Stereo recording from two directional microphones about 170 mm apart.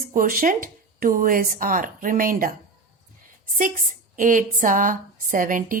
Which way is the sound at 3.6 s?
50° right (ahead or behind).